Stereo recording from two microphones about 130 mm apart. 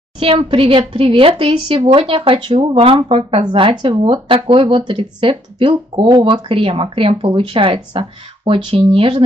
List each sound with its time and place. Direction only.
0.2 s speech: 45° right (ahead or behind)